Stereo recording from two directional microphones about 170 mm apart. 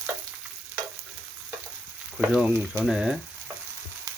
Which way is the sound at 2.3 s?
Centre (ahead or behind).